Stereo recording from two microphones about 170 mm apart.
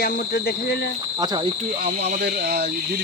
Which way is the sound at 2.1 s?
55° right (ahead or behind).